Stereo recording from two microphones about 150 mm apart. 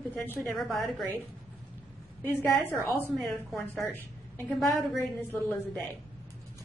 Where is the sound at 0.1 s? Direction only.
15° left (ahead or behind).